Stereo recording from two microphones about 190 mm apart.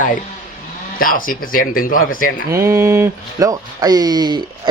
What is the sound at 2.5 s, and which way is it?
Speech, 15° right (ahead or behind).